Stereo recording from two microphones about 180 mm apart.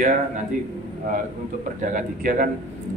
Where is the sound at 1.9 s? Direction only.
50° right (ahead or behind).